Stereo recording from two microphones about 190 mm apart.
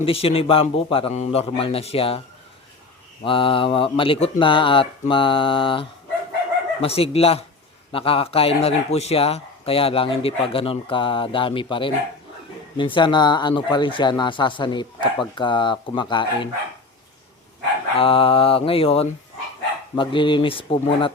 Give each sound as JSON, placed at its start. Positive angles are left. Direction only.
{"t": 0.0, "sound": "speech", "side_deg": 30}
{"t": 3.2, "sound": "speech", "side_deg": 25}
{"t": 17.9, "sound": "speech", "side_deg": 30}